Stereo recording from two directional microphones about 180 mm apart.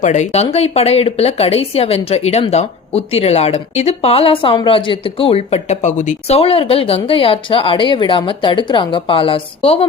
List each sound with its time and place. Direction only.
0.0 s speech: 40° left (ahead or behind)